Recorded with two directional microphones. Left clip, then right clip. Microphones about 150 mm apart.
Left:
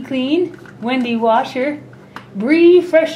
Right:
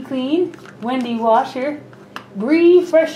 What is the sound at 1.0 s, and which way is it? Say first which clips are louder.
Speech: even; 15° left (ahead or behind).